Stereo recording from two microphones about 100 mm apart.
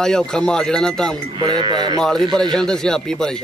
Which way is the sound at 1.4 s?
45° right (ahead or behind).